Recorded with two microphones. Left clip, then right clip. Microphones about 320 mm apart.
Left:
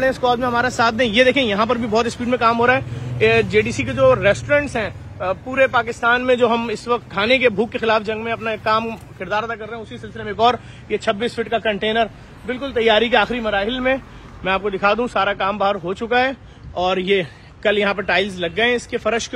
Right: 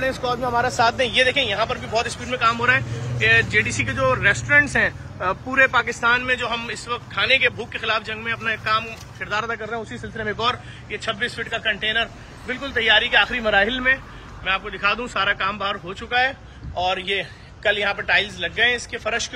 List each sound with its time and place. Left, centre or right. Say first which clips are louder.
0.3 s a man's voice: left 3 dB; left; by 10.4 s centre
10.9 s a man's voice: left 5 dB; centre